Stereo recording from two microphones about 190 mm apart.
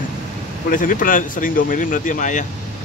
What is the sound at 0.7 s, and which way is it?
Speech, 45° left (ahead or behind).